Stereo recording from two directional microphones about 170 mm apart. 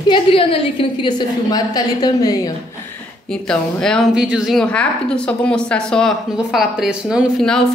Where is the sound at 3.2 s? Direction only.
5° left (ahead or behind).